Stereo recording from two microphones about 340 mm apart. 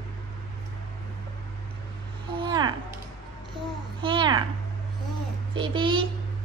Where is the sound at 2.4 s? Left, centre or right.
Centre.